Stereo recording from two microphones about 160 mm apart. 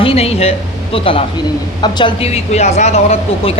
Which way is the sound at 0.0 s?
40° left (ahead or behind).